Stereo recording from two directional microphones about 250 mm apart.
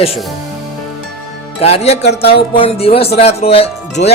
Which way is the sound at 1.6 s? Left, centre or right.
Left.